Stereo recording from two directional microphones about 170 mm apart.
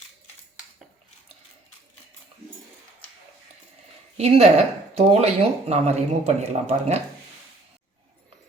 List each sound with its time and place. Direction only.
4.2 s speech: 40° right (ahead or behind)